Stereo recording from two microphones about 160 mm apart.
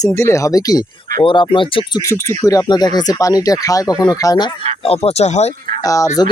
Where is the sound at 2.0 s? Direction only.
15° left (ahead or behind).